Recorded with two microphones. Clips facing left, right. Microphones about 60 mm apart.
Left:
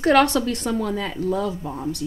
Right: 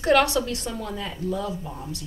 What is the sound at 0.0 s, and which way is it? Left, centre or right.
Speech, left.